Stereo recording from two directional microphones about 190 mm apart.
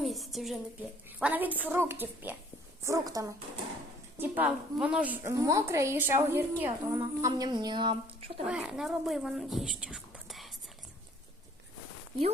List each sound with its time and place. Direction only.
0.0 s a sound: centre (ahead or behind)
1.2 s a woman's voice: 10° right (ahead or behind); by 7.9 s 25° right (ahead or behind)
8.4 s speech: 5° right (ahead or behind)